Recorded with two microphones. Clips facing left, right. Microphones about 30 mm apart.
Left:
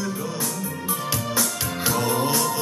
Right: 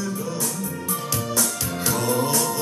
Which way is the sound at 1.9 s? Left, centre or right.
Centre.